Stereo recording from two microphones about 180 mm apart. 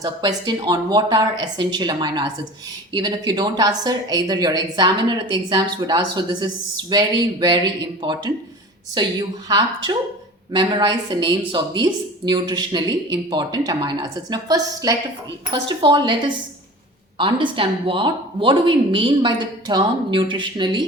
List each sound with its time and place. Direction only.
0.0 s a woman's voice: 20° right (ahead or behind)
17.2 s a woman's voice: 30° right (ahead or behind)